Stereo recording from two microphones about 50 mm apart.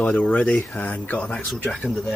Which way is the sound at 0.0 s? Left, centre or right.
Left.